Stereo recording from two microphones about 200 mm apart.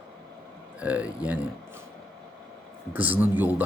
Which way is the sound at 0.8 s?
5° right (ahead or behind).